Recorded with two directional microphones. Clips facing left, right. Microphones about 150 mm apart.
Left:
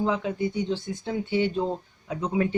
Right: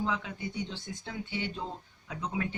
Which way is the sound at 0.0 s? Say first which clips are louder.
Left 8 dB; 40° left (ahead or behind).